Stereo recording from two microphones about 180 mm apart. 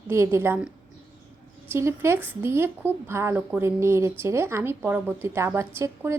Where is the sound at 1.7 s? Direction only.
15° right (ahead or behind).